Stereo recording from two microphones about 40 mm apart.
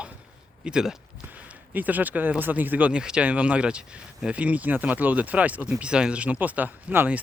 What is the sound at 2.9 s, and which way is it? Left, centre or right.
Speech, right.